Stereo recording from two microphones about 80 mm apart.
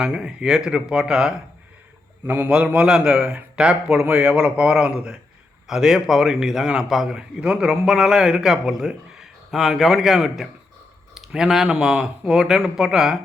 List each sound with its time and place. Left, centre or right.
0.0 s a man's voice: centre
2.2 s a man's voice: right
2.5 s a man's voice: centre